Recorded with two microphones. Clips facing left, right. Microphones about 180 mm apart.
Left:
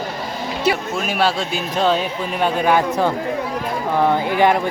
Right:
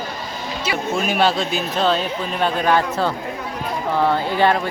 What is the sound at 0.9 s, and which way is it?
Speech, 5° left (ahead or behind).